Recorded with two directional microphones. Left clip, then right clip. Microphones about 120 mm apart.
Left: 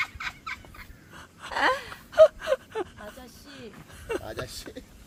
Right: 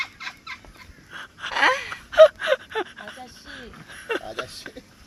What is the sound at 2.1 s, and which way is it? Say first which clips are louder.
Gasp: right 4 dB; 5° left (ahead or behind).